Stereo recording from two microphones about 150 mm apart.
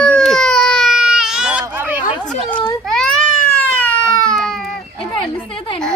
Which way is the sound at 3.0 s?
5° left (ahead or behind).